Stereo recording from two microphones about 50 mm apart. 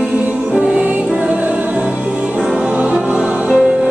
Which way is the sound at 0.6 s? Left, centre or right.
Right.